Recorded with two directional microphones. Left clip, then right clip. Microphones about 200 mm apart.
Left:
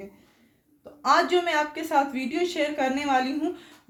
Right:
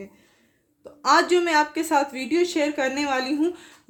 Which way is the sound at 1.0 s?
50° right (ahead or behind).